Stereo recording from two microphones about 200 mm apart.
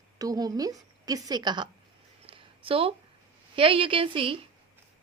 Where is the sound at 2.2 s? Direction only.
25° right (ahead or behind).